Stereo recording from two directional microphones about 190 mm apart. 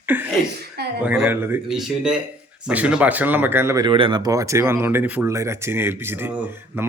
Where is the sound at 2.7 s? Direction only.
5° right (ahead or behind).